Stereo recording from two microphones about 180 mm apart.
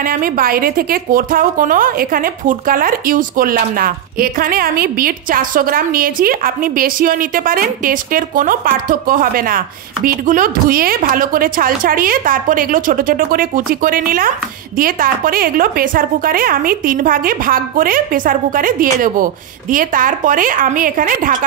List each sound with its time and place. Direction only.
0.0 s a woman's voice: 50° right (ahead or behind)